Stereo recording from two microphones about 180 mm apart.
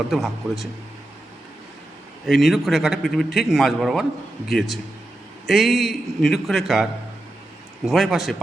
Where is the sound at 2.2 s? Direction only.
Centre (ahead or behind).